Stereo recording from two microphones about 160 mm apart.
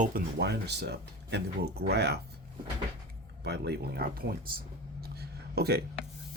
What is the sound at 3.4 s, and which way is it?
Speech, 90° right.